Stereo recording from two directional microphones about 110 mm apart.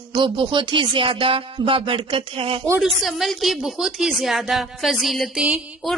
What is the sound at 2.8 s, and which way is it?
A woman's voice, centre (ahead or behind).